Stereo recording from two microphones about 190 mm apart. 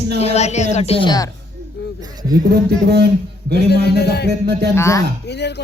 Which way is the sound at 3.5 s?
60° left (ahead or behind).